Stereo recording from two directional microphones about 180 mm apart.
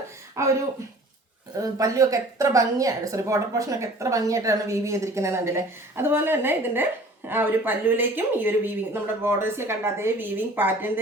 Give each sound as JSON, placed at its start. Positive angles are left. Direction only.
{"t": 0.4, "sound": "a woman's voice", "side_deg": -15}
{"t": 1.5, "sound": "a woman's voice", "side_deg": -20}